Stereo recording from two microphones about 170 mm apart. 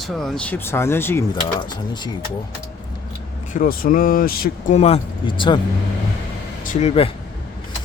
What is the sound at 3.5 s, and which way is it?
Speech, 55° left (ahead or behind).